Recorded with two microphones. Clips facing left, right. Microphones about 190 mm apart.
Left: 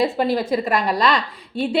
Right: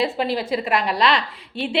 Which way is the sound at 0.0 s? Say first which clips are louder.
Left 3 dB; 45° left (ahead or behind).